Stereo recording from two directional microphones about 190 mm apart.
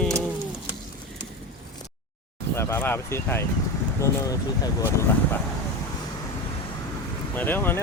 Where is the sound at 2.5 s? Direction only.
15° left (ahead or behind).